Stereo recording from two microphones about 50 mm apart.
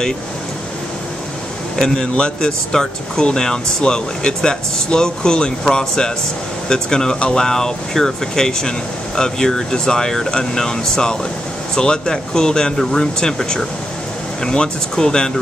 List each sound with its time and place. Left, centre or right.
2.1 s speech: centre